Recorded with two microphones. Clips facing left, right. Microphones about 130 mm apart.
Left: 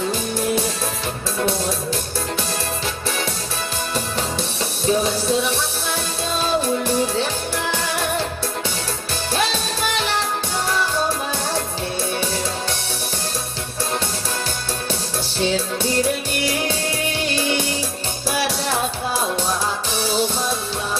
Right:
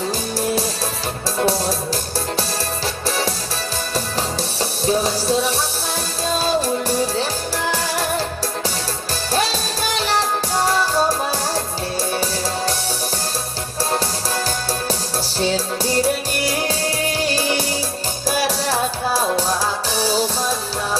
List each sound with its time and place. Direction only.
0.1 s music: 35° right (ahead or behind)
4.9 s music: 35° right (ahead or behind)
9.9 s music: 40° right (ahead or behind)
15.4 s music: 35° right (ahead or behind)